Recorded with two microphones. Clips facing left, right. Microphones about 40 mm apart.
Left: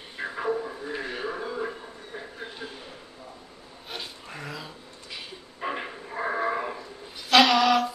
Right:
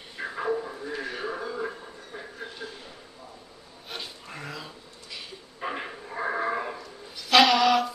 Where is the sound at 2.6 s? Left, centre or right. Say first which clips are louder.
Even; left.